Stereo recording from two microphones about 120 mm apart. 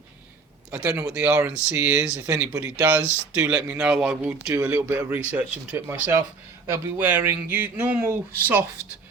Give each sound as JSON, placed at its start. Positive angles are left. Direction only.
{"t": 0.9, "sound": "speech", "side_deg": -25}
{"t": 1.1, "sound": "speech", "side_deg": -10}
{"t": 4.2, "sound": "speech", "side_deg": -15}